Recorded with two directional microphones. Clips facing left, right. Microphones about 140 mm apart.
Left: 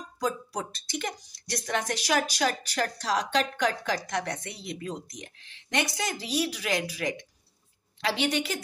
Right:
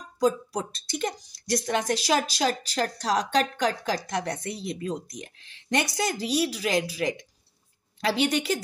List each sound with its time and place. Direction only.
0.5 s speech: 30° right (ahead or behind)